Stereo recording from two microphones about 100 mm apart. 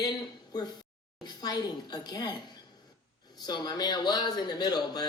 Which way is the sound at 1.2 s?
45° left (ahead or behind).